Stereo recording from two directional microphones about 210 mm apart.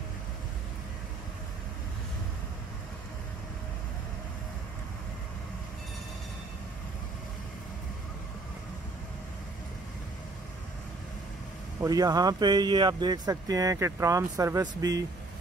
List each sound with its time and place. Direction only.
11.8 s speech: 15° right (ahead or behind)